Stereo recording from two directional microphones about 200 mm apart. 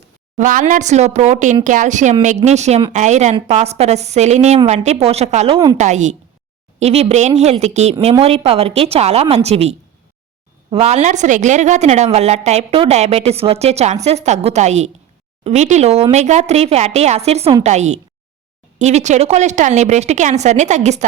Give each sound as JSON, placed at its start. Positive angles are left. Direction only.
{"t": 0.3, "sound": "a woman's voice", "side_deg": -40}